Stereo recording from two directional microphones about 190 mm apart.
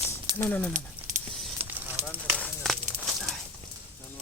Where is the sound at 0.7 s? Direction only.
40° right (ahead or behind).